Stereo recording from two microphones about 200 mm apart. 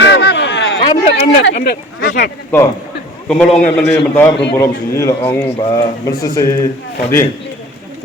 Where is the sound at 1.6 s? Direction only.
45° left (ahead or behind).